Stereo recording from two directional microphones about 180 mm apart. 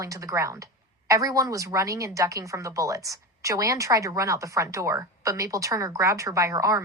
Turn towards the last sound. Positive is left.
turn(degrees=-20)  # may be behind; listen again after turning